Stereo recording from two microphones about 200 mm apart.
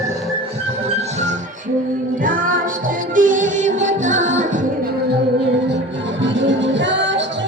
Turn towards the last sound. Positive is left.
turn(degrees=-65)  # may be behind; listen again after turning